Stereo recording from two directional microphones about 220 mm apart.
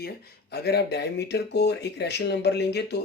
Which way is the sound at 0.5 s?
50° left (ahead or behind).